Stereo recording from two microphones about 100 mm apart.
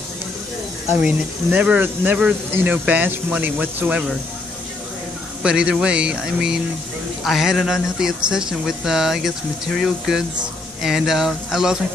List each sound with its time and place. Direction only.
1.0 s speech: 10° right (ahead or behind)
5.4 s speech: 10° right (ahead or behind)